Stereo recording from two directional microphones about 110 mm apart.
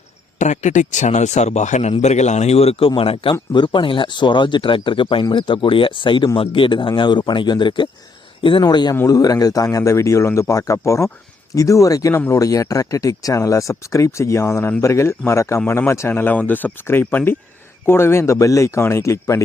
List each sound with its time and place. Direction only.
0.3 s speech: 90° left; by 8.6 s 55° left (ahead or behind)
8.6 s a man's voice: 40° left (ahead or behind)